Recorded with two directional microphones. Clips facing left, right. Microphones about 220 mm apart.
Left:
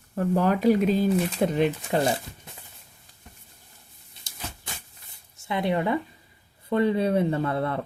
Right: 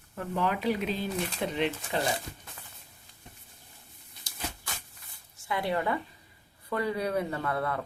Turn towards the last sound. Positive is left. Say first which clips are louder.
# left 5 dB
turn(degrees=25)  # may be behind; listen again after turning